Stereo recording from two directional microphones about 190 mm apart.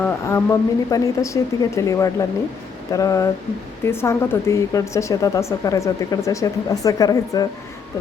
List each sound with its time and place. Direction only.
0.0 s speech: 15° left (ahead or behind)